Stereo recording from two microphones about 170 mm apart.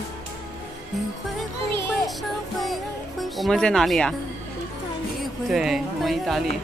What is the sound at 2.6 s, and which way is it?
Music, centre (ahead or behind).